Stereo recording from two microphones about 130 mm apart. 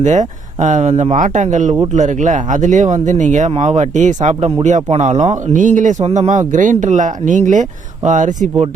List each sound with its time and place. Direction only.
0.0 s speech: 65° right (ahead or behind)
6.5 s speech: 80° right